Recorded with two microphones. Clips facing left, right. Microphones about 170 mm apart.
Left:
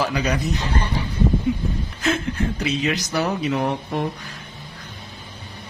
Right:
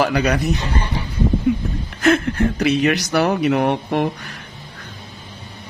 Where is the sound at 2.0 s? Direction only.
65° right (ahead or behind).